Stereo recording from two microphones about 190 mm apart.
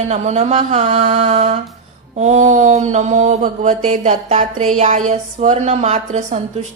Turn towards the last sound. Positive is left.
turn(degrees=-35)  # may be behind; listen again after turning